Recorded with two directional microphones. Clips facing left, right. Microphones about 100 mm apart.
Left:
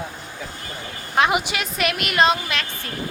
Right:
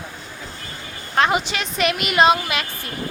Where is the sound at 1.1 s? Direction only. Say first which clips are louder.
Even; 10° left (ahead or behind); by 2.7 s 5° right (ahead or behind).